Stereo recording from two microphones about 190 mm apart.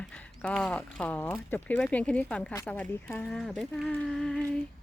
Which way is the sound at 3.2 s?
Centre (ahead or behind).